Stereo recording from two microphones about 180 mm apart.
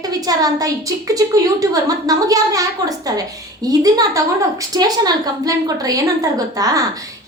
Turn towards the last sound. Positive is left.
turn(degrees=-20)  # may be behind; listen again after turning